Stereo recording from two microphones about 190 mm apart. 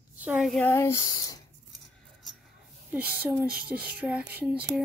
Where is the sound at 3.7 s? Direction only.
5° right (ahead or behind).